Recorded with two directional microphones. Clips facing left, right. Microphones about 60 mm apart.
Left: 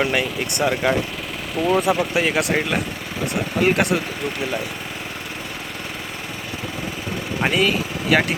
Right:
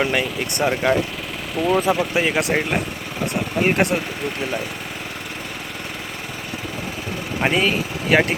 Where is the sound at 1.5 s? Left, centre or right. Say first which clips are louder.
Even; centre.